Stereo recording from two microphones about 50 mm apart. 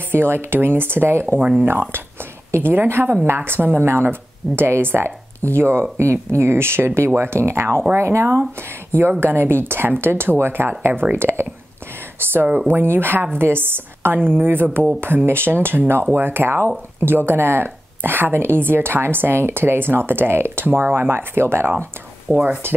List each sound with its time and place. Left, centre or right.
0.1 s speech: right
7.9 s speech: right
9.2 s speech: right